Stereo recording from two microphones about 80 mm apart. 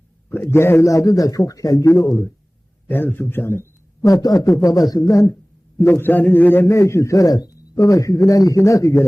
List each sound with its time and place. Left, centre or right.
0.5 s a man's voice: left
2.8 s speech: left
4.0 s a man's voice: left
5.3 s a man's voice: left